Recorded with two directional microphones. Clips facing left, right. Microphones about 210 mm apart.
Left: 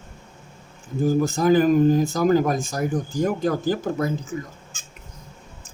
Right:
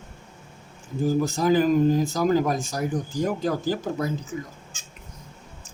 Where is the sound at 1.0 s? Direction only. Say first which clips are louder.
Left 3 dB; 50° left (ahead or behind).